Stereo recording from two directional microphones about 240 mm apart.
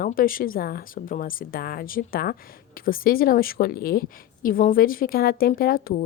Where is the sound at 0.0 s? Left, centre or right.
Left.